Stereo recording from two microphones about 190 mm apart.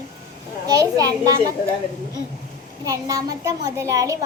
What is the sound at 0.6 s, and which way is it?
Speech, 20° right (ahead or behind).